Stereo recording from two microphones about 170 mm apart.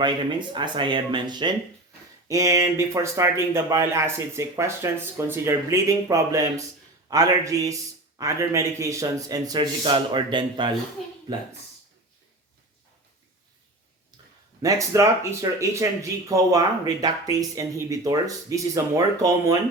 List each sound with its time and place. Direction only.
0.0 s speech: 25° right (ahead or behind)
11.0 s speech: centre (ahead or behind)
14.6 s speech: 20° right (ahead or behind)